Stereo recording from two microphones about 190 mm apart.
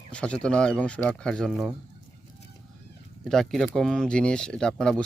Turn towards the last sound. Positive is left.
turn(degrees=5)  # may be behind; listen again after turning